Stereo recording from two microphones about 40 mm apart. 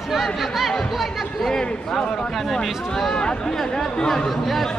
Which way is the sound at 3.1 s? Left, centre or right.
Left.